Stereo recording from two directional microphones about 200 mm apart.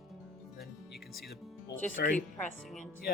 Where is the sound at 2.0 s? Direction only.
50° left (ahead or behind).